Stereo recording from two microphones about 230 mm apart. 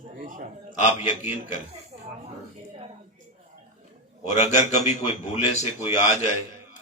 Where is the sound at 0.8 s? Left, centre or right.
Left.